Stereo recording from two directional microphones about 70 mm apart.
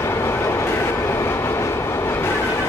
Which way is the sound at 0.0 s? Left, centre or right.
Left.